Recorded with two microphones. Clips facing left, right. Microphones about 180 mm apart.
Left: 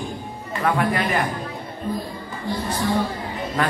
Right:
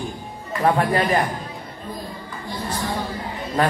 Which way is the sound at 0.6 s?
30° right (ahead or behind).